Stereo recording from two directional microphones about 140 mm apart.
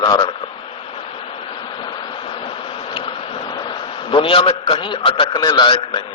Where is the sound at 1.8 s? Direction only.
35° left (ahead or behind).